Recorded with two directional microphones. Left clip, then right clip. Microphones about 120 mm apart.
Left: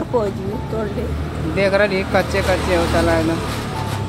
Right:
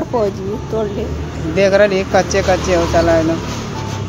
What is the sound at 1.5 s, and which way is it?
Speech, 25° right (ahead or behind).